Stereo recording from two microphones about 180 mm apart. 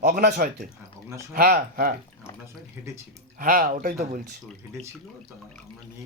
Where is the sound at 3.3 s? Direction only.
50° right (ahead or behind).